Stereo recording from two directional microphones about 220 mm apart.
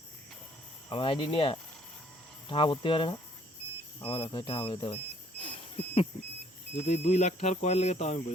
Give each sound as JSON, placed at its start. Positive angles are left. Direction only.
{"t": 0.9, "sound": "speech", "side_deg": 25}
{"t": 5.4, "sound": "a sound", "side_deg": 25}
{"t": 6.7, "sound": "speech", "side_deg": 30}